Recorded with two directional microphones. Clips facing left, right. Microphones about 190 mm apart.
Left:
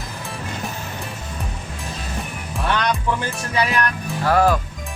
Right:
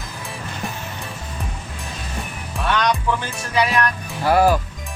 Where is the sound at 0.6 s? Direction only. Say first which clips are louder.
Right 3 dB; centre (ahead or behind).